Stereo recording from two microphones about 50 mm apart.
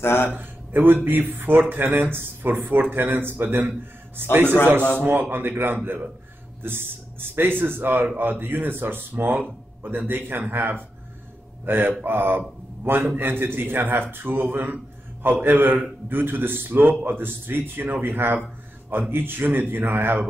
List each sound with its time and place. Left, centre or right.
0.0 s speech: left
0.3 s a man's voice: right